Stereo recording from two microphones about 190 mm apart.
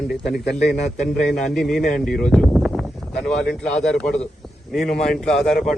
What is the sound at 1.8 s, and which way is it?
Speech, 50° left (ahead or behind).